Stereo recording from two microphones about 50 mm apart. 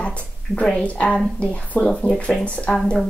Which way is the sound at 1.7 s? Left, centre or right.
Left.